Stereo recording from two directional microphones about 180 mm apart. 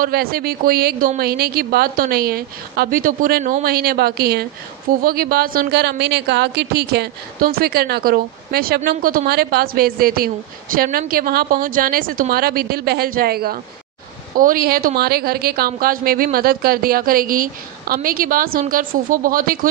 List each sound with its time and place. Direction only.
0.0 s a woman's voice: 60° right (ahead or behind)